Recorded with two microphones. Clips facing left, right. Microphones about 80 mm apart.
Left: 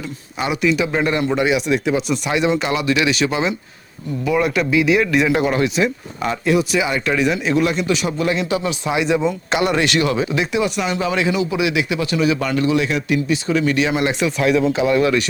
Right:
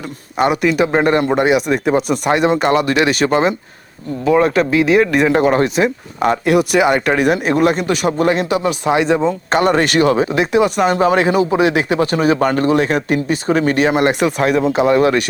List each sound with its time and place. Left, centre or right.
0.3 s speech: right
4.3 s speech: right